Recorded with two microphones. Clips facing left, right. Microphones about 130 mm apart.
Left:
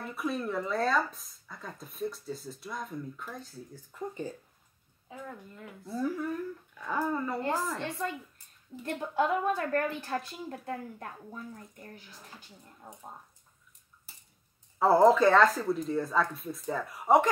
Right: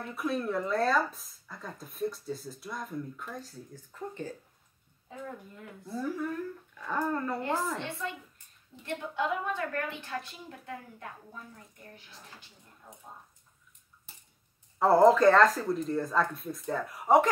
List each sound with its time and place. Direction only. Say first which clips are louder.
0.0 s speech: right 1 dB; centre (ahead or behind)
5.9 s speech: left 1 dB; 5° left (ahead or behind)
8.8 s a woman's voice: left 3 dB; 40° left (ahead or behind)
14.8 s speech: right 1 dB; centre (ahead or behind)